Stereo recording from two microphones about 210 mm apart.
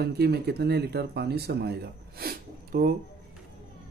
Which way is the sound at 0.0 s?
50° right (ahead or behind).